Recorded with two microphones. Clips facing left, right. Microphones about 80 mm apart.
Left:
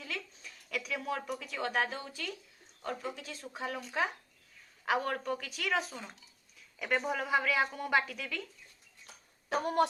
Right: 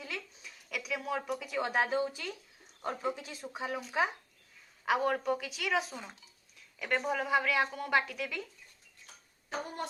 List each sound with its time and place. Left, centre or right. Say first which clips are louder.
0.0 s a sound: even; centre
1.5 s speech: right 2 dB; centre
3.6 s a woman's voice: right 2 dB; centre
9.5 s speech: left 9 dB; left